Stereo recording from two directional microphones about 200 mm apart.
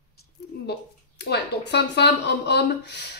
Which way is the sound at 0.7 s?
55° left (ahead or behind).